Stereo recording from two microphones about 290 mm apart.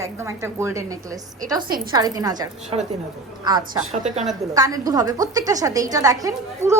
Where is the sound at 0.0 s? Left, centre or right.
Centre.